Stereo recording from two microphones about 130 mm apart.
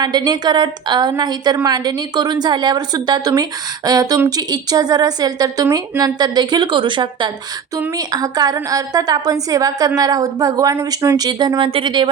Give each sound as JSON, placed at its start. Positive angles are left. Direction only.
{"t": 0.0, "sound": "a woman's voice", "side_deg": -30}